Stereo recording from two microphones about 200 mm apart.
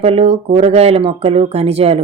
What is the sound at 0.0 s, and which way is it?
Speech, 30° right (ahead or behind).